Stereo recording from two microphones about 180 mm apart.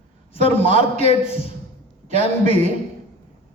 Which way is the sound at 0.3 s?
30° left (ahead or behind).